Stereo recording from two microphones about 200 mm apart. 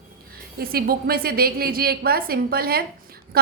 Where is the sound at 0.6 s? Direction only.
50° right (ahead or behind).